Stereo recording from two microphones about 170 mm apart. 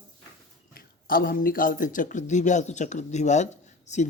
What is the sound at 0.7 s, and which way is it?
Speech, 60° left (ahead or behind).